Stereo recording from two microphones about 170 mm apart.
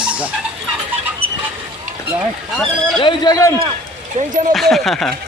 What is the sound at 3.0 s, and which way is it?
Speech, 25° left (ahead or behind).